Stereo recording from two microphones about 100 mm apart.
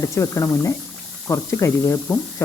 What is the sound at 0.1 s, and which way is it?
Speech, 30° left (ahead or behind).